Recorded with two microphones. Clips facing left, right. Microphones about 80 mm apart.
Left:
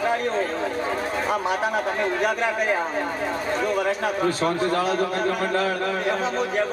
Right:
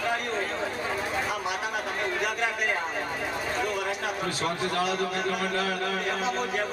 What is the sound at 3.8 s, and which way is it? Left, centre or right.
Speech, left.